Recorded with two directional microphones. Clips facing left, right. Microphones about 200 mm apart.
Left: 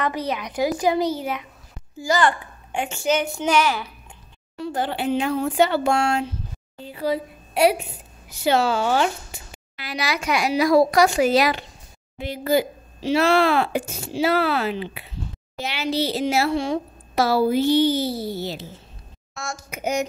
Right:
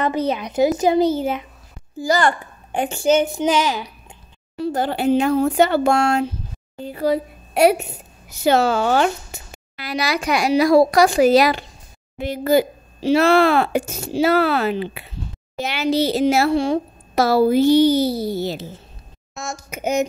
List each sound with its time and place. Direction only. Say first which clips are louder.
0.0 s a woman's voice: right 5 dB; 25° right (ahead or behind)
2.0 s a woman's voice: right 2 dB; 40° right (ahead or behind); by 3.9 s 15° right (ahead or behind)
4.6 s a woman's voice: right 4 dB; 40° right (ahead or behind)
19.3 s a woman's voice: right 2 dB; 20° right (ahead or behind)